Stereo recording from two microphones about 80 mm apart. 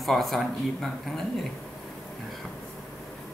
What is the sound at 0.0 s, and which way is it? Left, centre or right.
Speech, centre.